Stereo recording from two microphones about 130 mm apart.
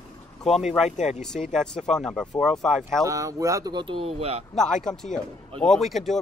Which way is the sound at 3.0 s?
25° right (ahead or behind).